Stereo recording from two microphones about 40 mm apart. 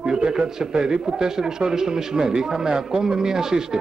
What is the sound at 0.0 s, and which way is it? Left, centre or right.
A man's voice, centre.